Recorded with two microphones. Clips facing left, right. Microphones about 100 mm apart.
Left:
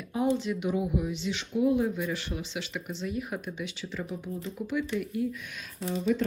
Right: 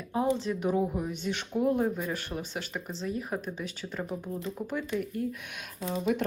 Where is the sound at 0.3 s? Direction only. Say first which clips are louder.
Right 1 dB; 40° right (ahead or behind).